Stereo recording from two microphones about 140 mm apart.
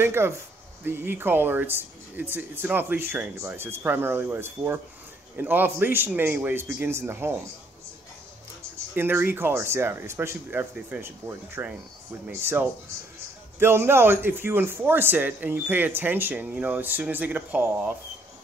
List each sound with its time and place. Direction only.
0.0 s a man's voice: 15° right (ahead or behind)
8.9 s a man's voice: 15° right (ahead or behind)